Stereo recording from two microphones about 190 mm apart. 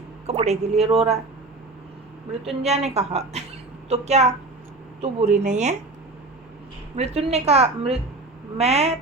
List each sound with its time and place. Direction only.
0.3 s a woman's voice: 35° right (ahead or behind)
2.4 s a woman's voice: 35° right (ahead or behind)
6.9 s a woman's voice: 35° right (ahead or behind)